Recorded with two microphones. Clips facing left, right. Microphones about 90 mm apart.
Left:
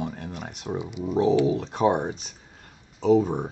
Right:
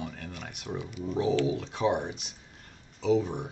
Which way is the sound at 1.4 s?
45° left (ahead or behind).